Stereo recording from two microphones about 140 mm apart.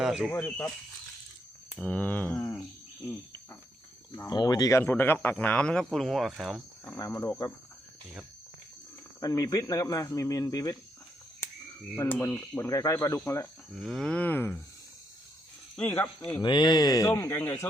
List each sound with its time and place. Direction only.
0.0 s speech: 5° right (ahead or behind)
0.3 s speech: 10° left (ahead or behind)
1.7 s speech: 10° left (ahead or behind)
4.1 s speech: 25° left (ahead or behind)
4.8 s speech: 15° left (ahead or behind)
6.8 s speech: 15° left (ahead or behind)
9.2 s speech: 25° left (ahead or behind)
12.2 s speech: 15° left (ahead or behind)
13.7 s speech: centre (ahead or behind)
15.7 s speech: 10° left (ahead or behind)
16.4 s speech: 35° left (ahead or behind); by 17.7 s 20° left (ahead or behind)